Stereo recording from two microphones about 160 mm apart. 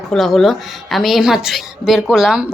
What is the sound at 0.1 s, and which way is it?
A woman's voice, centre (ahead or behind).